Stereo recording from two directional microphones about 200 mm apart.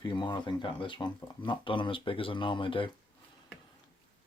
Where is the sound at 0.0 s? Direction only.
20° left (ahead or behind).